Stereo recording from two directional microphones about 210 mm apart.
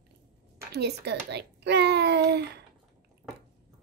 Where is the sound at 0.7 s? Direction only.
50° right (ahead or behind).